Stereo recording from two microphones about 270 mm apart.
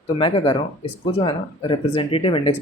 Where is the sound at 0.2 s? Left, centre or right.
Centre.